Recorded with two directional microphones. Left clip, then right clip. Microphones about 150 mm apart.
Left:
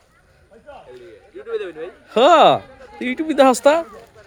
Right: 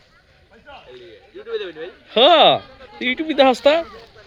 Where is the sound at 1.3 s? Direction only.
40° right (ahead or behind).